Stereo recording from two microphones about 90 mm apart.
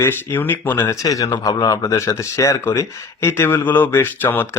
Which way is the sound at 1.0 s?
40° left (ahead or behind).